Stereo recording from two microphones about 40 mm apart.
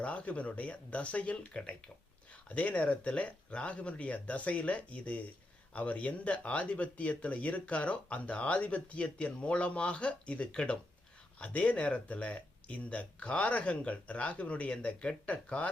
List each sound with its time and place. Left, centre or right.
0.0 s speech: left
10.5 s speech: left
11.3 s speech: left